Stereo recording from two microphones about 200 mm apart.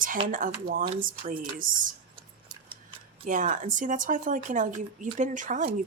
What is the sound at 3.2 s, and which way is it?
Speech, 40° right (ahead or behind).